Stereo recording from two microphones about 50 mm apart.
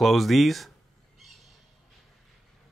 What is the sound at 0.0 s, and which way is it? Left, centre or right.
Speech, centre.